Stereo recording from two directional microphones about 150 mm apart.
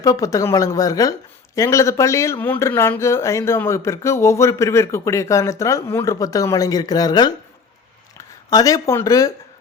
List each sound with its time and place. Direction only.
0.0 s speech: 25° left (ahead or behind)
8.4 s speech: 25° left (ahead or behind)